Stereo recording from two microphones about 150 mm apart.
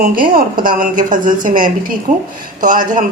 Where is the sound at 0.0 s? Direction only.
70° right (ahead or behind).